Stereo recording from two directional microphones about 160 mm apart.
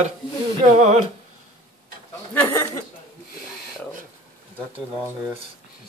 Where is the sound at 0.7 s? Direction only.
45° right (ahead or behind).